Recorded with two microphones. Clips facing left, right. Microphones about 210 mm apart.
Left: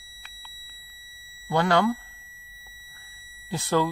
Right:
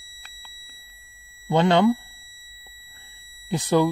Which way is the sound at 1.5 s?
20° right (ahead or behind).